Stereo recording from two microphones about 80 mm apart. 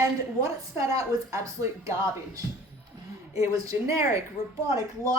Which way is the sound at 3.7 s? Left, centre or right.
Right.